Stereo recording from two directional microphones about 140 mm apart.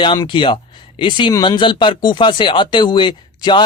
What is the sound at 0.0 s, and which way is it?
Speech, 35° left (ahead or behind).